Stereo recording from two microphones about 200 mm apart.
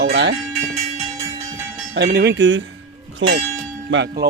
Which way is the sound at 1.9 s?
55° right (ahead or behind).